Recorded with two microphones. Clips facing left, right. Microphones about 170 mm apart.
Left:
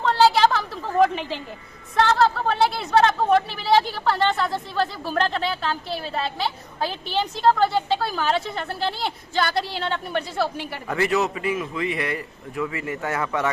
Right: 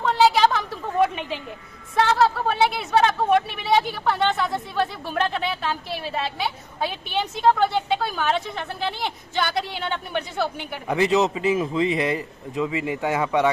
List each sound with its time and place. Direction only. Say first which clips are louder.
0.0 s a sound: even; centre (ahead or behind)
2.0 s speech: even; 5° right (ahead or behind)
10.8 s a man's voice: right 3 dB; 15° right (ahead or behind)